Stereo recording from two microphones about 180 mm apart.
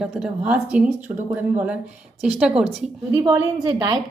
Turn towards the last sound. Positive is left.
turn(degrees=-25)  # may be behind; listen again after turning